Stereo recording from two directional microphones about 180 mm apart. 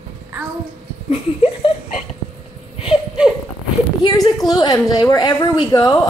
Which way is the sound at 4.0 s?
20° left (ahead or behind).